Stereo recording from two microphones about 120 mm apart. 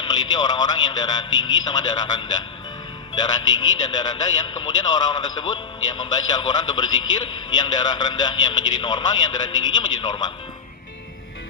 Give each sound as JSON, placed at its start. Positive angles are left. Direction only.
{"t": 0.0, "sound": "a man's voice", "side_deg": 35}
{"t": 3.2, "sound": "a man's voice", "side_deg": 35}